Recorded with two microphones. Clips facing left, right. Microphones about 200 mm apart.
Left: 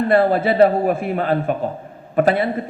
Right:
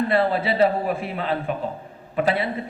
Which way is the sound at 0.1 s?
50° left (ahead or behind).